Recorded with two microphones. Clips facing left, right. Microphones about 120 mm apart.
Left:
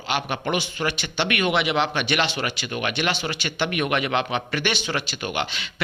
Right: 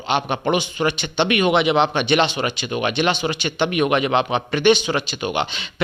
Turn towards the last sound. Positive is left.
turn(degrees=-20)  # may be behind; listen again after turning